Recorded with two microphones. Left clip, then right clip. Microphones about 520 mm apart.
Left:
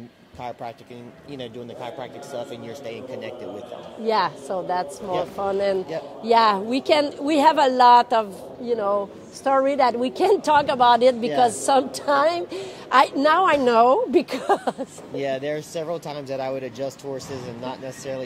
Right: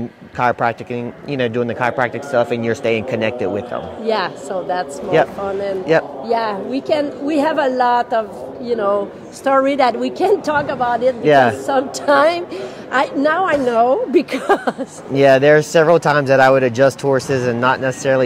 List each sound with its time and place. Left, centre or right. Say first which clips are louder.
0.4 s speech: right 17 dB; right
4.0 s speech: right 1 dB; left
6.2 s a woman's voice: left 1 dB; left
8.7 s a woman's voice: right 6 dB; centre; by 11.8 s left
12.1 s a woman's voice: right 8 dB; left
14.1 s speech: right 5 dB; centre
15.1 s speech: right 16 dB; right